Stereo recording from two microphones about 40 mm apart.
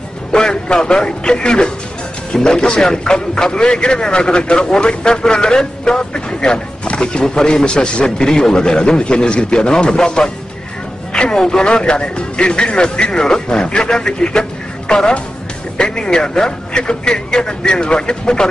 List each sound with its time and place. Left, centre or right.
0.3 s a man's voice: left